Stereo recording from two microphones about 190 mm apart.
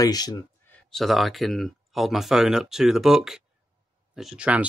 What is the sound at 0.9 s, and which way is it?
Speech, centre (ahead or behind).